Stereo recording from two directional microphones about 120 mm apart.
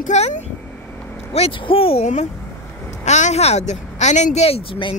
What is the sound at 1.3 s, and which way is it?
Speech, 50° left (ahead or behind).